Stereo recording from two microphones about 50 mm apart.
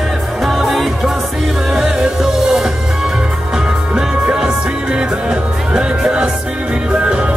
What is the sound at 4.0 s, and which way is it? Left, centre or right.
Music, centre.